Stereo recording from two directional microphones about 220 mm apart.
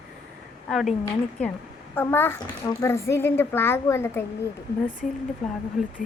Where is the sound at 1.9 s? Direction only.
10° left (ahead or behind).